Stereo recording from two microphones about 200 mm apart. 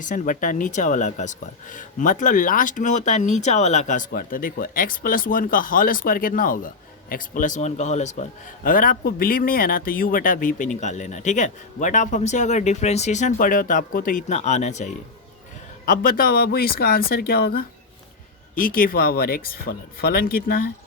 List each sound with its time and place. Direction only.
0.0 s a man's voice: 40° left (ahead or behind)